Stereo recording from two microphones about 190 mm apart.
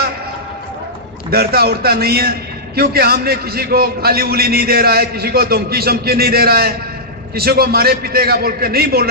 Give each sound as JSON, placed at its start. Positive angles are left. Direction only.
{"t": 1.3, "sound": "a man's voice", "side_deg": -55}